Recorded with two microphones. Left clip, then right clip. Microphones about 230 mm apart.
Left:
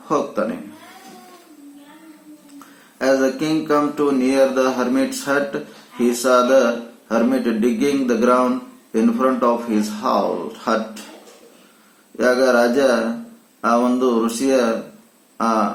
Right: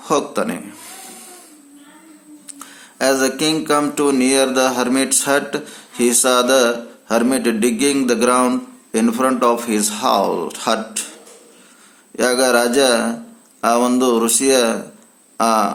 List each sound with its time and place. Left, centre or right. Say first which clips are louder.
0.1 s mantra: right 2 dB; right
3.0 s mantra: right 1 dB; right
12.1 s mantra: even; right